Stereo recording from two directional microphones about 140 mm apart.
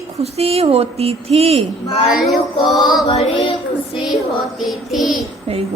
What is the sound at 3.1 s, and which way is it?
Child singing, 45° left (ahead or behind).